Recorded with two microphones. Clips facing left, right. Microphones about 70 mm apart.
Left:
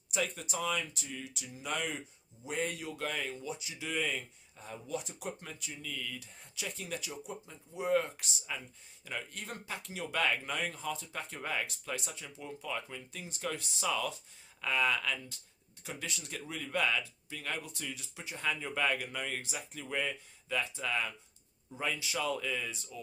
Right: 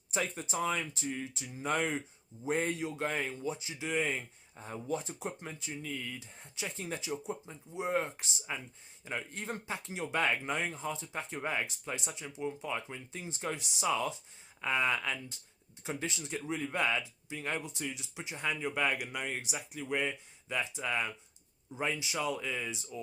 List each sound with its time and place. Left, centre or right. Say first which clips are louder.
0.1 s speech: right 1 dB; right